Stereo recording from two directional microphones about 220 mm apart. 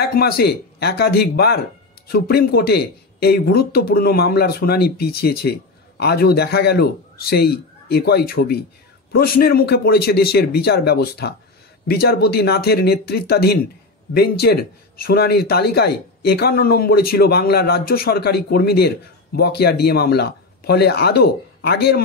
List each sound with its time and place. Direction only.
0.0 s speech: 45° left (ahead or behind)